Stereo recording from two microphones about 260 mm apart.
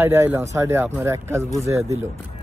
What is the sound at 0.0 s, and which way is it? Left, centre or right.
Speech, centre.